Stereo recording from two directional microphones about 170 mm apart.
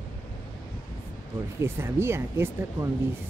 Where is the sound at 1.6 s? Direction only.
15° right (ahead or behind).